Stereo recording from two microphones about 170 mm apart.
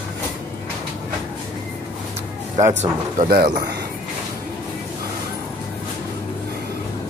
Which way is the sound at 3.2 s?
60° right (ahead or behind).